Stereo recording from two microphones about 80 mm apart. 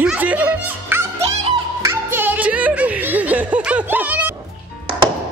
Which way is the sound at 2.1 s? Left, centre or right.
Right.